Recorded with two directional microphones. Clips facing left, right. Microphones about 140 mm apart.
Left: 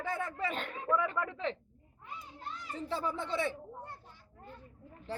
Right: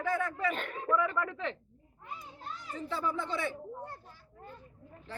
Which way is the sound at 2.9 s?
35° left (ahead or behind).